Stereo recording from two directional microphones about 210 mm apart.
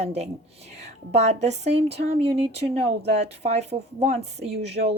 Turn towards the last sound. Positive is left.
turn(degrees=-30)  # may be behind; listen again after turning